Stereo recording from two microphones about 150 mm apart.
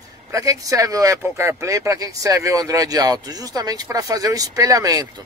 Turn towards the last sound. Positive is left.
turn(degrees=-25)  # may be behind; listen again after turning